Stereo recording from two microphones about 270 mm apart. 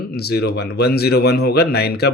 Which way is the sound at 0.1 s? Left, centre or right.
Left.